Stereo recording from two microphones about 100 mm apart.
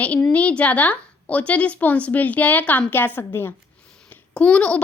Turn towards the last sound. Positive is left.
turn(degrees=10)  # may be behind; listen again after turning